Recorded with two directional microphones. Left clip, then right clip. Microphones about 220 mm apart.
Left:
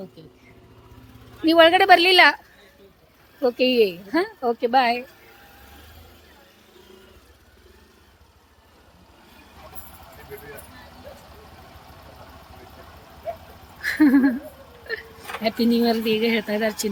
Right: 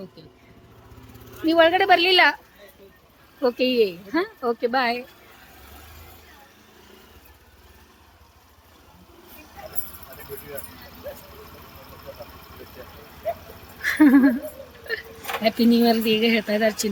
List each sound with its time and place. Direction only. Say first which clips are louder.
1.4 s a woman's voice: left 3 dB; 15° left (ahead or behind)
3.4 s a woman's voice: left 1 dB; 10° left (ahead or behind)
13.8 s speech: right 2 dB; centre (ahead or behind)
14.9 s vehicle: right 1 dB; centre (ahead or behind)
15.4 s speech: right 2 dB; centre (ahead or behind)